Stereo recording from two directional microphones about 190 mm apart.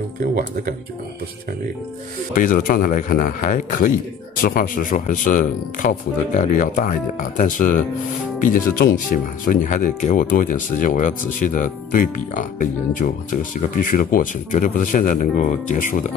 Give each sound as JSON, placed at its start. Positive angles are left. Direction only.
{"t": 2.3, "sound": "speech", "side_deg": 45}